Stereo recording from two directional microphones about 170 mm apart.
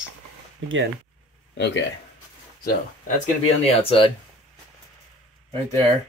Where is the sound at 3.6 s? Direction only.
35° left (ahead or behind).